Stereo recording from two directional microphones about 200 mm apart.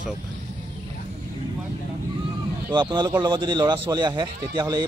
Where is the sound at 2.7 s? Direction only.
20° right (ahead or behind).